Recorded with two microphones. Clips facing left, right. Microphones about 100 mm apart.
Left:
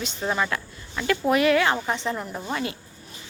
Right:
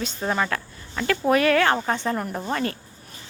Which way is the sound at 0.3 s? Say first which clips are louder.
Right 1 dB; 35° right (ahead or behind).